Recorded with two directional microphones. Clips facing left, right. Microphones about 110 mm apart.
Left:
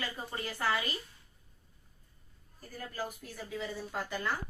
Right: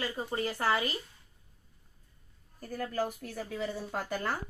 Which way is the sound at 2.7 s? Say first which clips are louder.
Right 7 dB; 65° right (ahead or behind).